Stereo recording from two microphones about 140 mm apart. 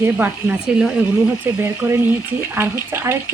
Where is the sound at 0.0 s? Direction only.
10° right (ahead or behind).